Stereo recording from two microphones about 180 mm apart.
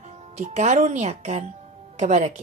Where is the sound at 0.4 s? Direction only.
40° right (ahead or behind).